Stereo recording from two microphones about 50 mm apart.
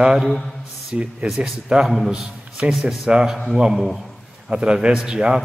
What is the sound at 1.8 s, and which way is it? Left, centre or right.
Speech, centre.